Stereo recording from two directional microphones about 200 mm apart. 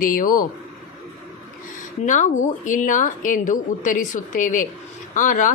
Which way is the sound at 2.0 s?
40° left (ahead or behind).